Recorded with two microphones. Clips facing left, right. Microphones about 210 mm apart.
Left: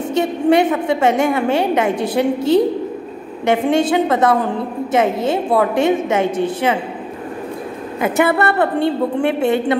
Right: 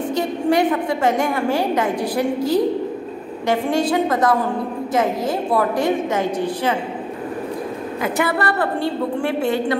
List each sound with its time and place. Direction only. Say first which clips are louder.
0.1 s a woman's voice: left 5 dB; 25° left (ahead or behind)
5.8 s a woman's voice: left 4 dB; 25° left (ahead or behind)
8.0 s a woman's voice: left 5 dB; 25° left (ahead or behind)